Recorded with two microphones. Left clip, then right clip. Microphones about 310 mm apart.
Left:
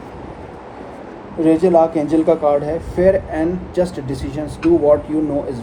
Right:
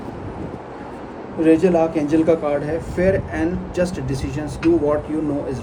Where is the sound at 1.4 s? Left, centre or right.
Centre.